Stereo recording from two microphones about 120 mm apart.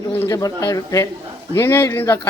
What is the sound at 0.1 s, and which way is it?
Speech, 15° left (ahead or behind).